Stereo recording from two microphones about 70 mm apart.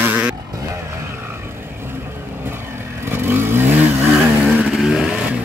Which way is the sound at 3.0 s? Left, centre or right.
Right.